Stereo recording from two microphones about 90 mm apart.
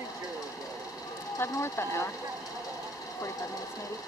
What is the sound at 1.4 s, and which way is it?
Speech, 30° left (ahead or behind).